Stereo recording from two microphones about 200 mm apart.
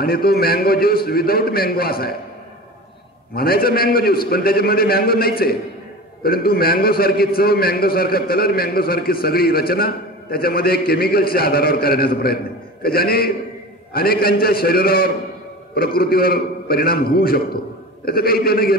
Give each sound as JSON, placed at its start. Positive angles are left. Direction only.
{"t": 0.0, "sound": "a man's voice", "side_deg": 50}
{"t": 3.3, "sound": "a man's voice", "side_deg": 50}